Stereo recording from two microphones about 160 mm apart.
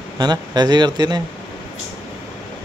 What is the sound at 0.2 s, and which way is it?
Speech, 25° right (ahead or behind).